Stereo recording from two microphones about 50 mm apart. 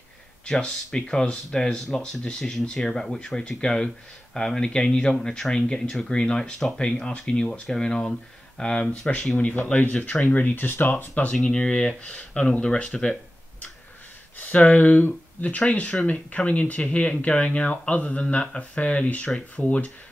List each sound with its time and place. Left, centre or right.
0.5 s speech: centre; by 11.2 s left
11.4 s speech: centre